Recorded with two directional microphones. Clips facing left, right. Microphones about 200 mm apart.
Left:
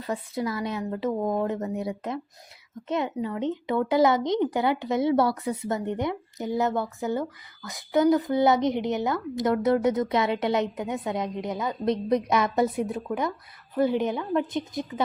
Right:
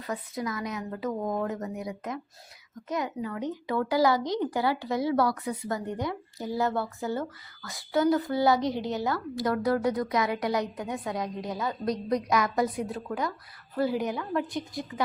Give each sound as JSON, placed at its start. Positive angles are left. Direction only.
{"t": 0.0, "sound": "a woman's voice", "side_deg": 30}